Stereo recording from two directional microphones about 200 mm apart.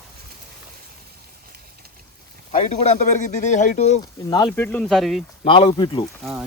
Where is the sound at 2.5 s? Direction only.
35° left (ahead or behind).